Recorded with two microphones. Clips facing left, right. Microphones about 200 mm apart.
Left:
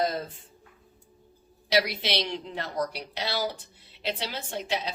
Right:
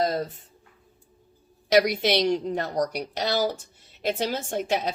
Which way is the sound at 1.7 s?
45° right (ahead or behind).